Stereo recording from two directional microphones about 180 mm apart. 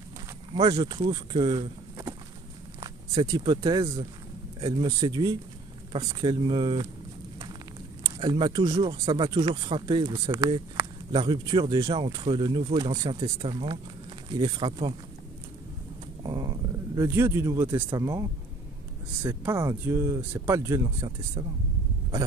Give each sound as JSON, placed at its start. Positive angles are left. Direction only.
{"t": 0.6, "sound": "speech", "side_deg": -25}
{"t": 8.0, "sound": "speech", "side_deg": -25}
{"t": 16.2, "sound": "speech", "side_deg": -25}